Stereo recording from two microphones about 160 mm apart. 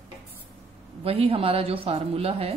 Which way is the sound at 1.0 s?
40° right (ahead or behind).